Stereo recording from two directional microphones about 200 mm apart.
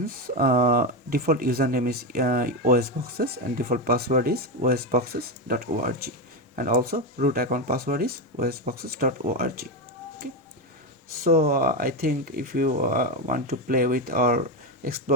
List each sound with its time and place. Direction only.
0.3 s speech: 45° right (ahead or behind)
11.2 s speech: 50° right (ahead or behind)